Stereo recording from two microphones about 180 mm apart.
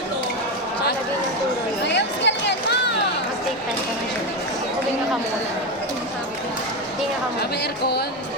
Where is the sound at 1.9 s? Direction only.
70° left (ahead or behind).